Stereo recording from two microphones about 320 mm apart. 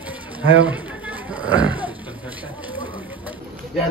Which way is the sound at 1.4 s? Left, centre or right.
Centre.